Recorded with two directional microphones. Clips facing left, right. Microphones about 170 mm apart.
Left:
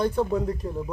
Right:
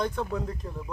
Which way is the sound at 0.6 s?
30° left (ahead or behind).